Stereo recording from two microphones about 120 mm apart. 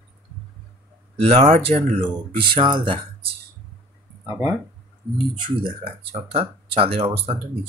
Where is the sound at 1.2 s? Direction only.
60° right (ahead or behind).